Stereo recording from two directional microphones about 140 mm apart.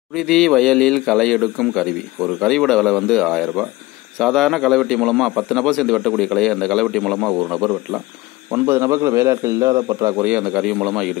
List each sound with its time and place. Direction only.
0.1 s a man's voice: centre (ahead or behind)
8.5 s a man's voice: 20° right (ahead or behind)
10.2 s a man's voice: 10° right (ahead or behind)